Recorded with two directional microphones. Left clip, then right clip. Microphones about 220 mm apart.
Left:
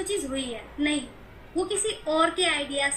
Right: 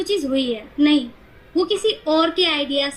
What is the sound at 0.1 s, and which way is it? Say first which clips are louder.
A woman's voice: right 9 dB; 25° right (ahead or behind).